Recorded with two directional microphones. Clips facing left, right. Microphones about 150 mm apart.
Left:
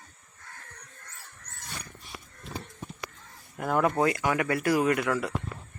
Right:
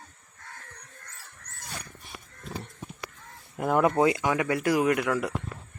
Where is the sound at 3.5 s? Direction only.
20° right (ahead or behind).